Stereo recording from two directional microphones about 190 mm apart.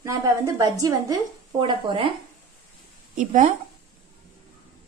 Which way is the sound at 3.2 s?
40° right (ahead or behind).